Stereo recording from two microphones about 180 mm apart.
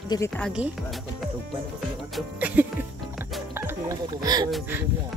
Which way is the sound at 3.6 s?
15° right (ahead or behind).